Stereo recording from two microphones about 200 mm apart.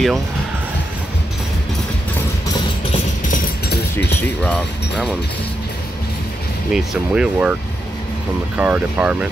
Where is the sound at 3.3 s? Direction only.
55° left (ahead or behind).